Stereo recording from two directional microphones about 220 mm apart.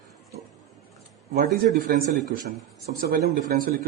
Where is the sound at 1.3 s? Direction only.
35° right (ahead or behind).